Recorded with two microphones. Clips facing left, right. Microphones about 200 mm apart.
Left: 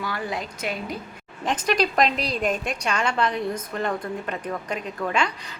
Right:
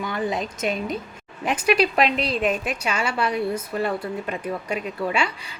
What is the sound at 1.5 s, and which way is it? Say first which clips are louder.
A woman's voice: right 3 dB; 10° right (ahead or behind).